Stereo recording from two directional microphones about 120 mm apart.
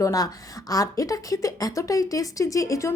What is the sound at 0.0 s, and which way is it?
A woman's voice, 30° left (ahead or behind).